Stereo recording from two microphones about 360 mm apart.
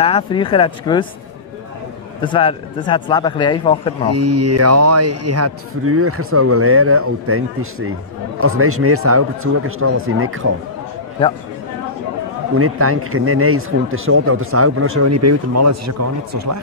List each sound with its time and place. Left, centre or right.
0.0 s speech: centre
2.2 s speech: centre
4.1 s a man's voice: right
12.5 s a man's voice: right